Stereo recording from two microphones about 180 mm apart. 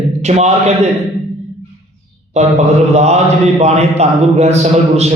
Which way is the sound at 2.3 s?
40° right (ahead or behind).